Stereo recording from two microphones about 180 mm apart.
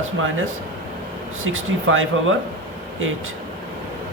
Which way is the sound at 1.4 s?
90° right.